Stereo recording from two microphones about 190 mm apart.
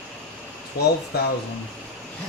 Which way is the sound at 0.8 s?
55° left (ahead or behind).